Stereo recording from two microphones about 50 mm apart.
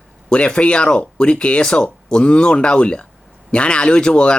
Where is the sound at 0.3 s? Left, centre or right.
Centre.